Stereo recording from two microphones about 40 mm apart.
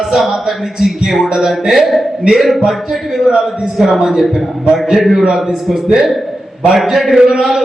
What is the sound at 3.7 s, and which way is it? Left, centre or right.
Speech, centre.